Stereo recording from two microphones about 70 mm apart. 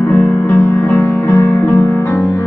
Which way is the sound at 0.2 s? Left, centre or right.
Left.